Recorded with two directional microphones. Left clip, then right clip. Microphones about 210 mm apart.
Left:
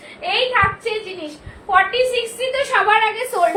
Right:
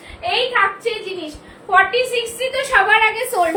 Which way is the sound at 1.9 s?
10° right (ahead or behind).